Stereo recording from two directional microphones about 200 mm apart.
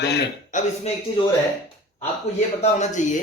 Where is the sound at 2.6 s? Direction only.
35° left (ahead or behind).